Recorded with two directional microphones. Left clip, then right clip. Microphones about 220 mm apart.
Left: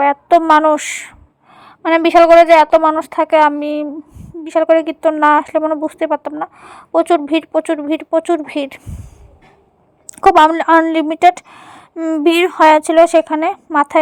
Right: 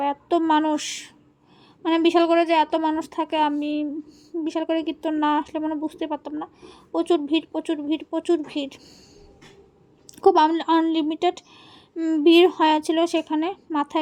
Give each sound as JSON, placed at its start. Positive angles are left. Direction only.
{"t": 0.0, "sound": "speech", "side_deg": 20}
{"t": 10.2, "sound": "speech", "side_deg": 20}